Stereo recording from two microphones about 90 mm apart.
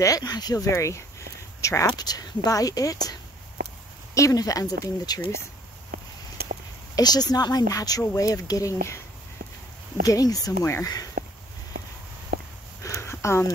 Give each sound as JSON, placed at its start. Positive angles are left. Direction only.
{"t": 0.0, "sound": "speech", "side_deg": 45}
{"t": 0.7, "sound": "speech", "side_deg": 35}
{"t": 7.0, "sound": "speech", "side_deg": 50}
{"t": 10.0, "sound": "speech", "side_deg": 40}
{"t": 10.6, "sound": "speech", "side_deg": 30}
{"t": 12.8, "sound": "a sound", "side_deg": 30}